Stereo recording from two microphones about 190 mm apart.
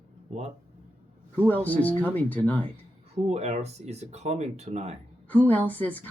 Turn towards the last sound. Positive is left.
turn(degrees=10)  # may be behind; listen again after turning